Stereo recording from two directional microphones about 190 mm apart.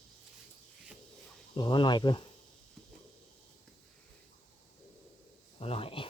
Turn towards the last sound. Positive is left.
turn(degrees=30)  # may be behind; listen again after turning